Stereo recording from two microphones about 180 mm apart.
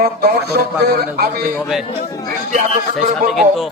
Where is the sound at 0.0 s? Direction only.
60° right (ahead or behind).